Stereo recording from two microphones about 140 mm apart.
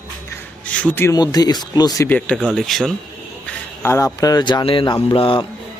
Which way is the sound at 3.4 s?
15° left (ahead or behind).